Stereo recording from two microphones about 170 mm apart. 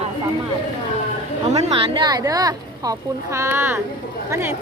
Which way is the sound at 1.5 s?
40° right (ahead or behind).